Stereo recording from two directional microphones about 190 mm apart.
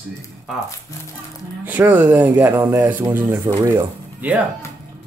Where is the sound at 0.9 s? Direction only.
15° left (ahead or behind).